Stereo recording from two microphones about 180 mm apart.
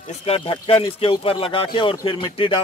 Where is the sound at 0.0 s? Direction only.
35° left (ahead or behind).